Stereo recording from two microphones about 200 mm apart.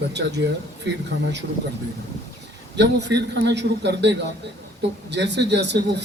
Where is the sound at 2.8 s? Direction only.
60° right (ahead or behind).